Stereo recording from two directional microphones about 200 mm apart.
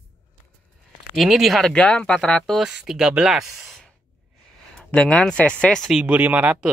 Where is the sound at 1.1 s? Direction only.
Centre (ahead or behind).